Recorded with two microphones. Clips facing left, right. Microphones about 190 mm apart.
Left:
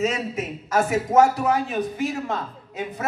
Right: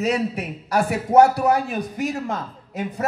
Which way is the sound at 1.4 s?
40° right (ahead or behind).